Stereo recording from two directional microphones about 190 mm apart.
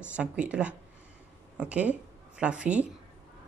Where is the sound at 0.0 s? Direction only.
5° right (ahead or behind).